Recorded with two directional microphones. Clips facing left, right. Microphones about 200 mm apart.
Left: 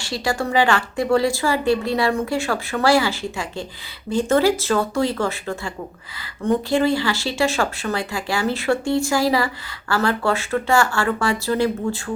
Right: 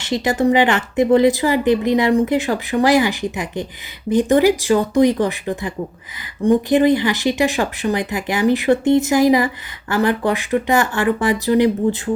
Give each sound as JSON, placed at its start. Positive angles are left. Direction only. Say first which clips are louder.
{"t": 0.0, "sound": "speech", "louder": "right 7 dB", "side_deg": -20}